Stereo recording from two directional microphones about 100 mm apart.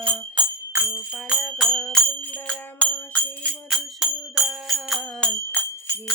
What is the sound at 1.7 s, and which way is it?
Music, 5° left (ahead or behind).